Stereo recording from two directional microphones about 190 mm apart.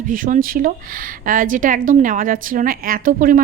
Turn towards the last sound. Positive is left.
turn(degrees=-45)  # may be behind; listen again after turning